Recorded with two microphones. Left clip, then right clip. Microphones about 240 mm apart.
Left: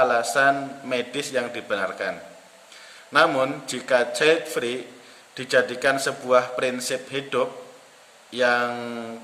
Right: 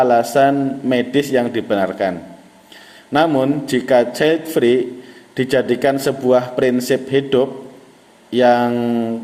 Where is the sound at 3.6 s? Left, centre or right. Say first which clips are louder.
Right 8 dB; left.